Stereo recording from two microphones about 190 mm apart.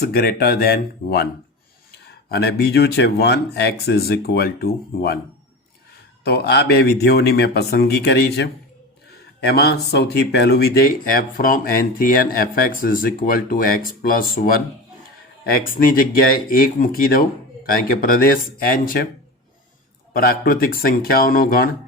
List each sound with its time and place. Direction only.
0.0 s speech: 55° left (ahead or behind)
2.3 s speech: 60° left (ahead or behind)
6.2 s speech: 60° left (ahead or behind)
20.1 s speech: 50° left (ahead or behind)